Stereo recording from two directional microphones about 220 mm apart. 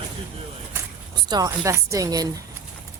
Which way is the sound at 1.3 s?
15° right (ahead or behind).